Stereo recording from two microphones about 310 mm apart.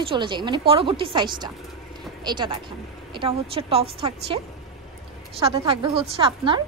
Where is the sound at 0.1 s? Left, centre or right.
Centre.